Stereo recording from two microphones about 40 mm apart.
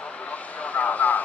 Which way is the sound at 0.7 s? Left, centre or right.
Left.